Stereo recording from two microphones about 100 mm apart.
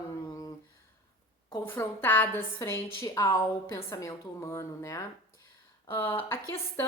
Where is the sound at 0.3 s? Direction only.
40° left (ahead or behind).